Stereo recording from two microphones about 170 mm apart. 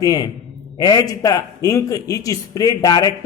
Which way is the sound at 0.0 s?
20° left (ahead or behind).